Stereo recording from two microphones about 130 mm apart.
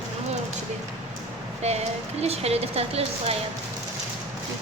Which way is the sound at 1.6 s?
55° right (ahead or behind).